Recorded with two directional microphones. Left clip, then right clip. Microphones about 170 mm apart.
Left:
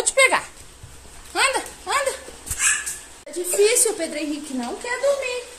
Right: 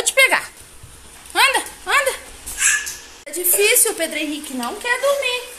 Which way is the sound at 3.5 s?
Centre (ahead or behind).